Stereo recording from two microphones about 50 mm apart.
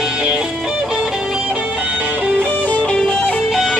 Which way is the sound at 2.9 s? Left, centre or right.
Centre.